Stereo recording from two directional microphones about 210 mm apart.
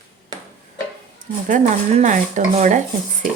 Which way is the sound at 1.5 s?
35° right (ahead or behind).